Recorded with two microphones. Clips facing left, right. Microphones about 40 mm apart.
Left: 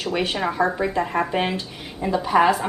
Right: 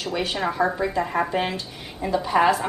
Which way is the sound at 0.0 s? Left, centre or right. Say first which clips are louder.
Left 2 dB; centre.